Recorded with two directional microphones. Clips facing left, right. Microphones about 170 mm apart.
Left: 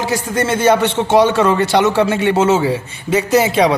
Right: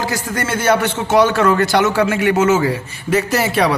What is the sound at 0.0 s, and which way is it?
A man's voice, 25° left (ahead or behind).